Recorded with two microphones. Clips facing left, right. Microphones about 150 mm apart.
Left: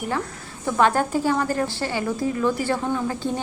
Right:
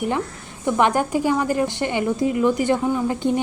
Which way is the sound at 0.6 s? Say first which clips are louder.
Right 1 dB; 15° right (ahead or behind).